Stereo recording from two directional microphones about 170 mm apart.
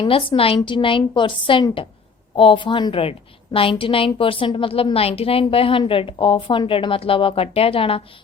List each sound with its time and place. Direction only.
0.0 s a woman's voice: 30° left (ahead or behind)